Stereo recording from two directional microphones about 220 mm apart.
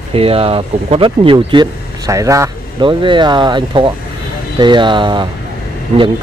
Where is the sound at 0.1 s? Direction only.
25° right (ahead or behind).